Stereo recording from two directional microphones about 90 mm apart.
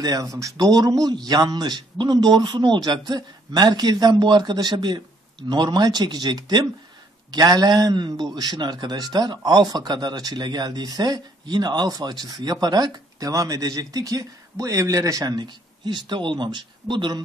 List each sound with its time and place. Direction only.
0.0 s a man's voice: 40° right (ahead or behind); by 17.2 s 60° right (ahead or behind)